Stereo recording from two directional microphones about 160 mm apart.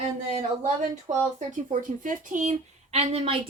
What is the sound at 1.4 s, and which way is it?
Speech, 55° right (ahead or behind).